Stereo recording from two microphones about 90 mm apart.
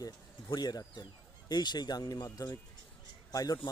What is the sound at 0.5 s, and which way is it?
Speech, 50° left (ahead or behind).